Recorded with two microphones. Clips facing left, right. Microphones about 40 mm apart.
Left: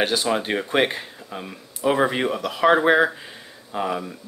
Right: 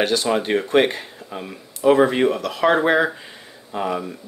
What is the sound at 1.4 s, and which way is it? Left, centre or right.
Speech, centre.